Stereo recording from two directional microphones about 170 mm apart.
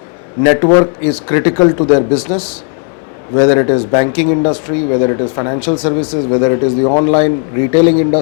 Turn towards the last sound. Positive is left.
turn(degrees=20)  # may be behind; listen again after turning